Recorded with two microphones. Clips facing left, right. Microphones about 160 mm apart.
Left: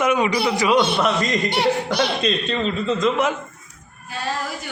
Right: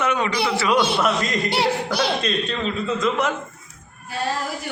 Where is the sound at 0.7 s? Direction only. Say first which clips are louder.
Even; centre (ahead or behind).